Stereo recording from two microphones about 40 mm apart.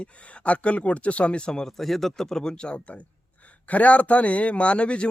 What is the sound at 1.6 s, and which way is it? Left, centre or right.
A man's voice, centre.